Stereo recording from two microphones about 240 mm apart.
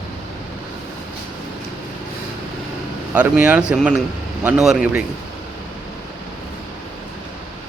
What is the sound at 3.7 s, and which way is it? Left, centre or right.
Speech, centre.